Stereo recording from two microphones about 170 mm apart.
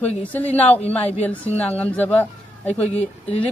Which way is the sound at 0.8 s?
35° left (ahead or behind).